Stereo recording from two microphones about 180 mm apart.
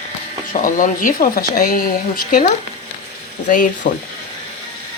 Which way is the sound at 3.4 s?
45° left (ahead or behind).